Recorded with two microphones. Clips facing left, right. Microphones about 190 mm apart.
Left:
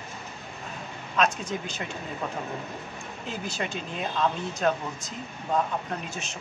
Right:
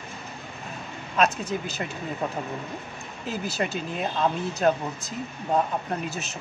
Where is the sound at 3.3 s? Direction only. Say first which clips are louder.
Right 4 dB; 5° right (ahead or behind).